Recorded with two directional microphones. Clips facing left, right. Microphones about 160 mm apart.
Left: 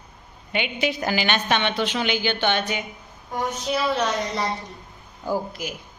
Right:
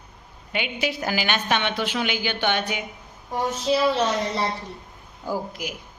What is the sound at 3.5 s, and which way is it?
Speech, 30° right (ahead or behind).